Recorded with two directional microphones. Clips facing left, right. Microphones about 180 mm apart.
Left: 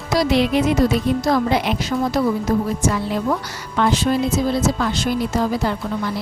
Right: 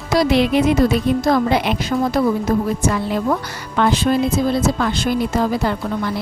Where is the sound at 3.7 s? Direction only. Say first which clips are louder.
Right 2 dB; 55° right (ahead or behind).